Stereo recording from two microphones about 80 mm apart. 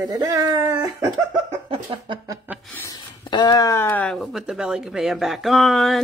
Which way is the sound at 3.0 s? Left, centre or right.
Left.